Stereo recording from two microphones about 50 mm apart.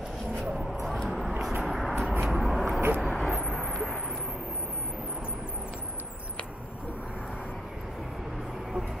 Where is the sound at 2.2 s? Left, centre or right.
Centre.